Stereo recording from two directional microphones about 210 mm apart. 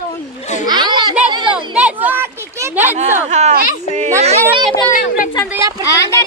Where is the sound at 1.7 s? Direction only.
5° right (ahead or behind).